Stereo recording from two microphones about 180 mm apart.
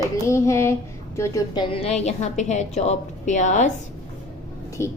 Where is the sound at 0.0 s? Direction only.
15° left (ahead or behind); by 3.7 s 40° left (ahead or behind).